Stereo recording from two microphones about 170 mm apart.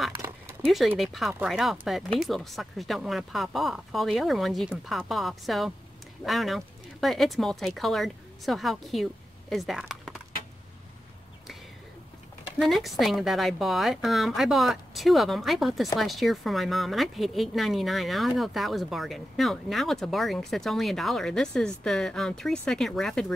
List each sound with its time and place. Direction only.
0.2 s a sound: 20° right (ahead or behind)
0.7 s a woman's voice: centre (ahead or behind)
12.5 s a woman's voice: centre (ahead or behind)